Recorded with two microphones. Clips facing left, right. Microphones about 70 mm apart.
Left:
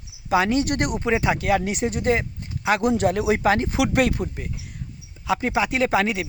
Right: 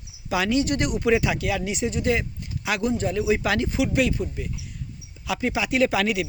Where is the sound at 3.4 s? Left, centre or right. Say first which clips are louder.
Left 4 dB; left.